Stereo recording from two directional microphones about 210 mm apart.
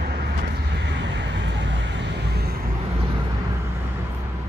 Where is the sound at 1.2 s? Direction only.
60° right (ahead or behind).